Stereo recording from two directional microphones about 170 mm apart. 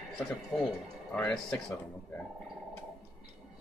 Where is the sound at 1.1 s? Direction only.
10° left (ahead or behind).